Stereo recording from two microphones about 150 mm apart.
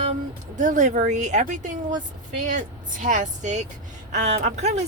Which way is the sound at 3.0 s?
55° right (ahead or behind).